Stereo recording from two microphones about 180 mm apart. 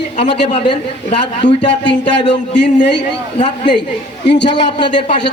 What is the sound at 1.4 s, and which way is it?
Speech, 5° left (ahead or behind).